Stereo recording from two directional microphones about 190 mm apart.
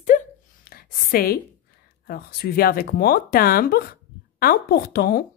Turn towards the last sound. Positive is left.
turn(degrees=55)  # may be behind; listen again after turning